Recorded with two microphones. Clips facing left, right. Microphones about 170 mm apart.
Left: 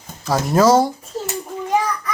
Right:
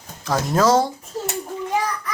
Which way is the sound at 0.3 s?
5° left (ahead or behind).